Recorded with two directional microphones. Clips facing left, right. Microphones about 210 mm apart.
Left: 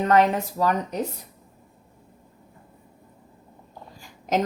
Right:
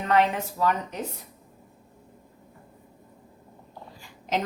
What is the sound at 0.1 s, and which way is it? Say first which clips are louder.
Speech: left 1 dB; 40° left (ahead or behind).